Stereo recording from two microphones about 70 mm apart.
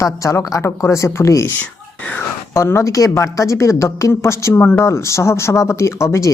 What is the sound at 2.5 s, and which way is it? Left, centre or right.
A man's voice, left.